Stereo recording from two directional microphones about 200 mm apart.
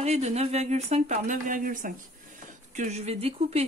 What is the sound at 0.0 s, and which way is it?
Speech, 35° right (ahead or behind).